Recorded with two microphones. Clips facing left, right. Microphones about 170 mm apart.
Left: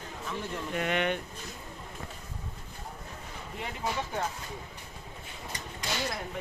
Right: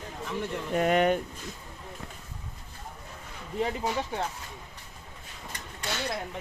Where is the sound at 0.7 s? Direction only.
40° right (ahead or behind).